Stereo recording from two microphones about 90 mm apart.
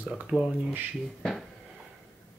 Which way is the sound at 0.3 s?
5° right (ahead or behind).